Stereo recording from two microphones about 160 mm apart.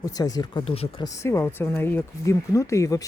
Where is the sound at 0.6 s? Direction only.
40° left (ahead or behind).